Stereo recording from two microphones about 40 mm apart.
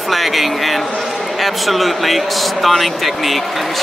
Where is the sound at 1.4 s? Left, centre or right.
Centre.